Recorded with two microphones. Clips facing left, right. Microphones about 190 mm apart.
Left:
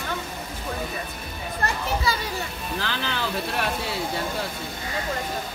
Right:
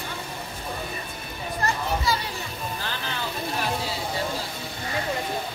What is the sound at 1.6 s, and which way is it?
Children playing, 60° left (ahead or behind).